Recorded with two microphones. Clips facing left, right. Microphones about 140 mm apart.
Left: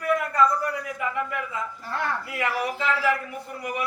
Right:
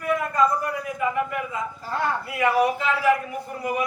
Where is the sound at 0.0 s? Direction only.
15° right (ahead or behind).